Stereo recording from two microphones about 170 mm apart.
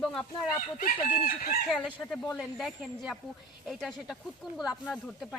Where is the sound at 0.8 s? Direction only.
55° left (ahead or behind).